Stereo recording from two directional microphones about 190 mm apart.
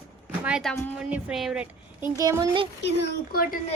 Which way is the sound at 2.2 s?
20° right (ahead or behind).